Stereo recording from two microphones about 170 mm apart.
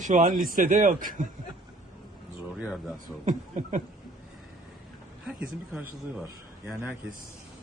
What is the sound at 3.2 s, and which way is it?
Speech, 45° right (ahead or behind).